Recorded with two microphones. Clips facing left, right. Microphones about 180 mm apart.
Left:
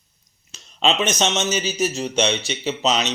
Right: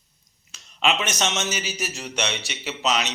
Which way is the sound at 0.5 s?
25° left (ahead or behind).